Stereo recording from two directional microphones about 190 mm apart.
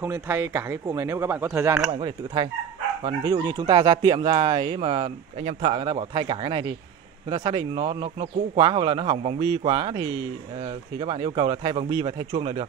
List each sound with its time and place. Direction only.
0.0 s speech: 10° right (ahead or behind)
1.9 s speech: 25° right (ahead or behind)